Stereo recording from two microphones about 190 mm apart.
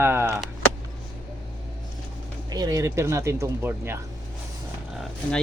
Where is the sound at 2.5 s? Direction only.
20° right (ahead or behind).